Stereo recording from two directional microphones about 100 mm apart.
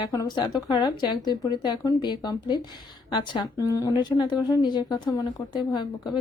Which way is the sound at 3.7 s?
40° left (ahead or behind).